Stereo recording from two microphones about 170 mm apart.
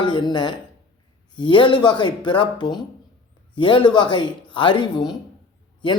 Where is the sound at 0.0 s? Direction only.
25° left (ahead or behind).